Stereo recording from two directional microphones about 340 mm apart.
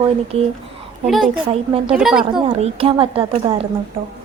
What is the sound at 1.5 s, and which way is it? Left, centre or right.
Speech, centre.